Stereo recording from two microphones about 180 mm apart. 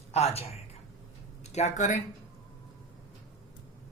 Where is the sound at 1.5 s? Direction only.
40° left (ahead or behind).